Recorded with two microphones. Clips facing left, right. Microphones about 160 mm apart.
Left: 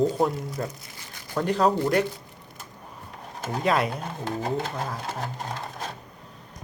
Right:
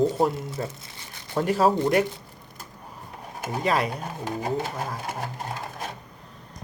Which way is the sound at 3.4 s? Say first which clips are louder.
Left 1 dB; 5° right (ahead or behind).